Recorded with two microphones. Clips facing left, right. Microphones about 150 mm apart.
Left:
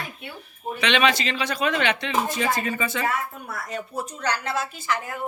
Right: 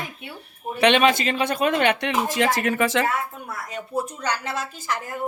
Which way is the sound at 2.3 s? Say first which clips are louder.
Right 3 dB; 90° right.